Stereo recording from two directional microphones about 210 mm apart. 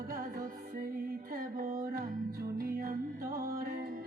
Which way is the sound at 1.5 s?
40° right (ahead or behind).